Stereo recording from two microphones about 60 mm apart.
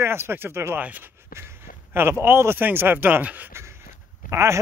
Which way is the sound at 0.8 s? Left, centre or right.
Right.